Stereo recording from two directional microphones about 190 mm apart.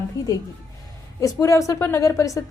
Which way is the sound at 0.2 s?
15° left (ahead or behind).